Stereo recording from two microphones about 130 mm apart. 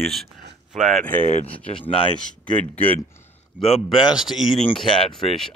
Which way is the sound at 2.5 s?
15° left (ahead or behind).